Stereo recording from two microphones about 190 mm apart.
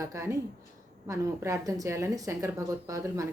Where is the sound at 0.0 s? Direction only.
15° right (ahead or behind).